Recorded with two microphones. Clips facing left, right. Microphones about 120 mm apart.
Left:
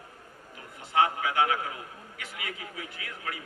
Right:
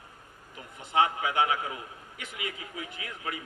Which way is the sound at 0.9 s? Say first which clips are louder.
Even; 20° right (ahead or behind).